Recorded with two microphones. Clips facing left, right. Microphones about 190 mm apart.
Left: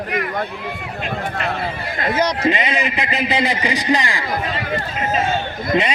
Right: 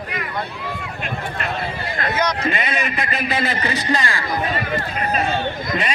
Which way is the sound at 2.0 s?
30° left (ahead or behind).